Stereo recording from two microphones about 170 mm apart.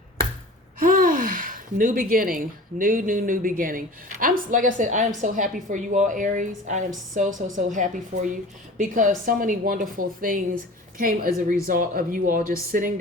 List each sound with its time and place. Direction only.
0.8 s a woman's voice: 55° right (ahead or behind)